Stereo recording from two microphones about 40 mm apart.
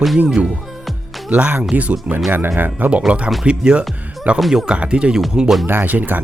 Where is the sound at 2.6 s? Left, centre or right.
Right.